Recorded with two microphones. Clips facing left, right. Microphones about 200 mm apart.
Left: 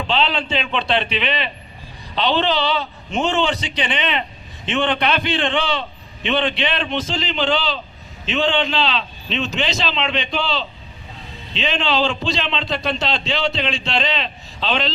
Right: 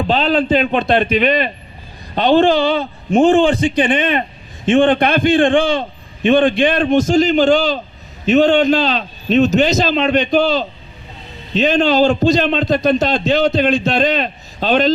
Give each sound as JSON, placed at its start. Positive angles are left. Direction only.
{"t": 0.1, "sound": "a man's voice", "side_deg": -40}